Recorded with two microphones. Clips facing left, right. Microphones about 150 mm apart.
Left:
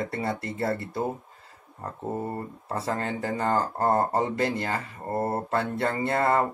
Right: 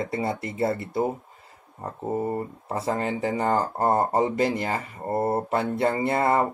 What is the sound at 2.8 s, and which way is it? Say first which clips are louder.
Speech: right 4 dB; 20° right (ahead or behind).